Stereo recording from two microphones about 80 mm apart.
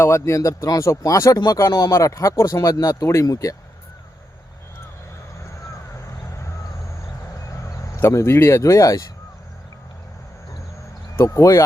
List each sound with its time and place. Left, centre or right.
0.0 s speech: left
6.1 s a sound: left
7.6 s speech: left
11.2 s speech: left